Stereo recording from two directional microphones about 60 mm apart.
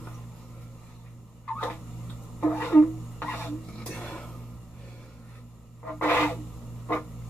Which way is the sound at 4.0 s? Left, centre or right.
Centre.